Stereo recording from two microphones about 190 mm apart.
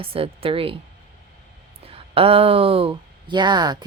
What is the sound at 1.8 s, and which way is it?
Speech, 30° right (ahead or behind).